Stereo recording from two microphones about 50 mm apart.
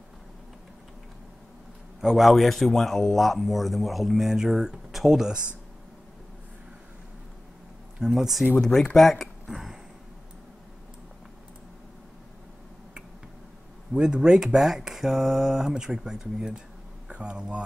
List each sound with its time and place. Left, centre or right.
2.0 s a man's voice: centre
8.0 s speech: centre
8.5 s speech: centre
13.9 s speech: centre